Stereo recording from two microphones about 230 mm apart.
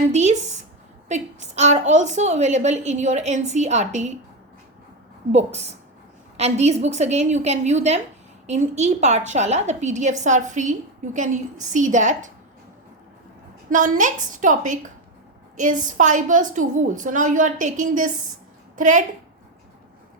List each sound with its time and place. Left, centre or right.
0.1 s a woman's voice: right
5.3 s a woman's voice: right
13.7 s a woman's voice: right